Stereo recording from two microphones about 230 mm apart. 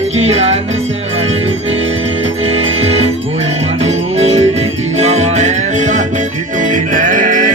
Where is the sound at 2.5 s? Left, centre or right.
Right.